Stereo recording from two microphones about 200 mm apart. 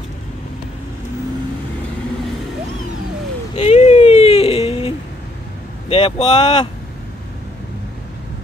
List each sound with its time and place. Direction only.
3.5 s whimper: 35° left (ahead or behind)
5.9 s speech: 30° left (ahead or behind)